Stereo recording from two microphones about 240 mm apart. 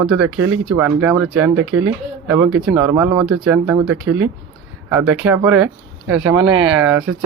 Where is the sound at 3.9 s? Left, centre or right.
Right.